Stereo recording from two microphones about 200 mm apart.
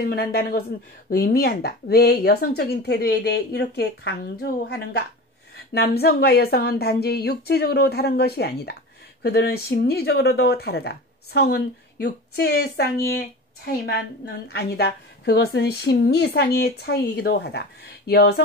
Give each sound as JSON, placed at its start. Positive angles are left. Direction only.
{"t": 0.0, "sound": "speech", "side_deg": 50}